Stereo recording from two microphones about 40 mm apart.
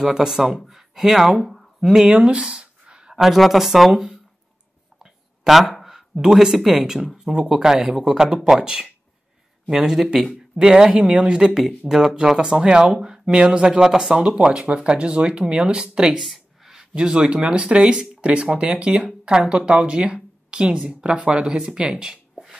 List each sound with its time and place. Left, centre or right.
0.0 s speech: centre
1.4 s a sound: centre
1.8 s speech: centre
2.2 s a sound: right
3.2 s speech: centre
4.9 s a sound: centre
5.9 s speech: centre
7.2 s speech: centre
10.1 s speech: right
11.9 s speech: centre
12.4 s speech: right
14.8 s speech: right
16.2 s a sound: centre
16.7 s speech: right